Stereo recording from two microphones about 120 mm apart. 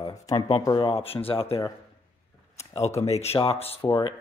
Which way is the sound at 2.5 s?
60° left (ahead or behind).